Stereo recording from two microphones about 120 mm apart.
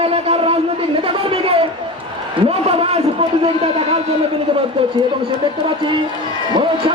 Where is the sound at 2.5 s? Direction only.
55° right (ahead or behind).